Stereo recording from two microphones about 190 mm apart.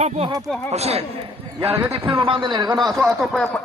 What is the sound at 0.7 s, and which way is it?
A man's voice, 35° right (ahead or behind).